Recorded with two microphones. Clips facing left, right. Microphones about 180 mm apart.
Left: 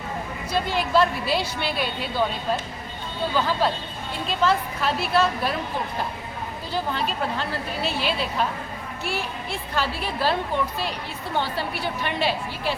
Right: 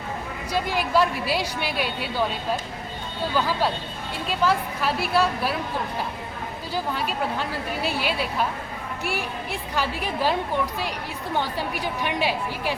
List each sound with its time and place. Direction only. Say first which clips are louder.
0.5 s a woman's voice: left 1 dB; 10° right (ahead or behind)
3.3 s a woman's voice: left 1 dB; 10° right (ahead or behind)
6.7 s a woman's voice: left 1 dB; 10° right (ahead or behind)
11.3 s a woman's voice: left 1 dB; 15° right (ahead or behind)